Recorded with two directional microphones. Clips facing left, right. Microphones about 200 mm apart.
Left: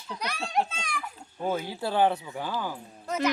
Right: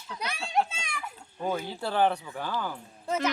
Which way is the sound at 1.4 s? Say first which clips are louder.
Left 1 dB; 10° left (ahead or behind).